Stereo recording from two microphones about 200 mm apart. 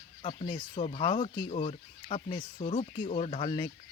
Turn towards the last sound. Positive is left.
turn(degrees=25)  # may be behind; listen again after turning